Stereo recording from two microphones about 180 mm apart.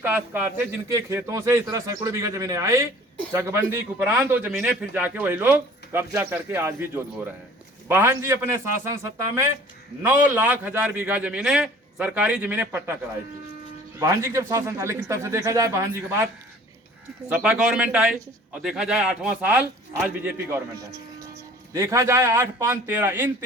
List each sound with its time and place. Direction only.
0.0 s a man's voice: 10° right (ahead or behind)
14.0 s a man's voice: 15° right (ahead or behind)
17.2 s a man's voice: 10° right (ahead or behind)